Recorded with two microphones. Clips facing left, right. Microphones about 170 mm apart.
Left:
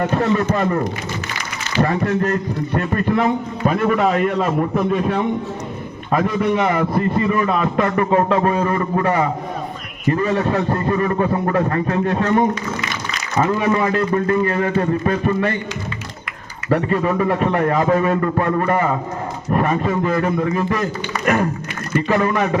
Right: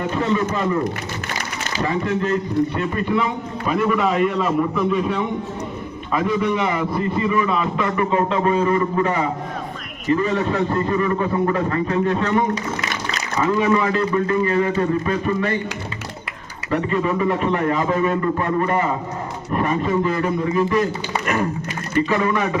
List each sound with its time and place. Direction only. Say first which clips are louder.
0.0 s a man's voice: left 3 dB; 50° left (ahead or behind)
1.8 s a man's voice: left 4 dB; 50° left (ahead or behind)
13.7 s a man's voice: left 1 dB; 45° left (ahead or behind)
16.6 s a man's voice: left 3 dB; 40° left (ahead or behind)
22.1 s a man's voice: left 5 dB; 40° left (ahead or behind)